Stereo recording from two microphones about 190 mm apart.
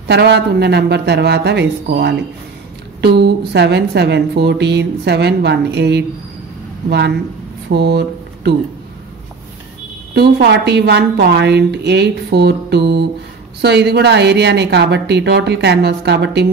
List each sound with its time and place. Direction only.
0.1 s speech: 60° right (ahead or behind)
10.1 s speech: 60° right (ahead or behind)